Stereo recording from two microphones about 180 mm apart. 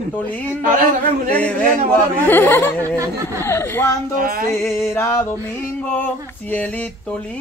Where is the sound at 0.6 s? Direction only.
50° right (ahead or behind).